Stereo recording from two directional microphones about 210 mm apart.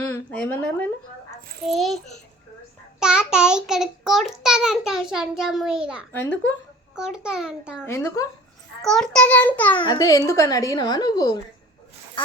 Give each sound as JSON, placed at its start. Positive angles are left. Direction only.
{"t": 0.1, "sound": "a child's voice", "side_deg": 10}
{"t": 7.9, "sound": "a child's voice", "side_deg": 10}
{"t": 8.8, "sound": "a child's voice", "side_deg": 0}
{"t": 9.7, "sound": "a child's voice", "side_deg": 20}